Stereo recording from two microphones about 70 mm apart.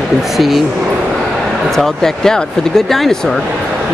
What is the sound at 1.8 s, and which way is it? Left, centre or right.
Speech, centre.